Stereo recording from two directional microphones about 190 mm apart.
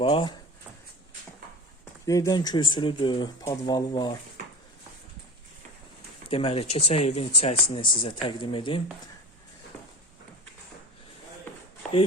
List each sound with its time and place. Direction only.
0.0 s speech: 25° left (ahead or behind)
2.0 s speech: 20° left (ahead or behind)
6.3 s speech: 30° left (ahead or behind)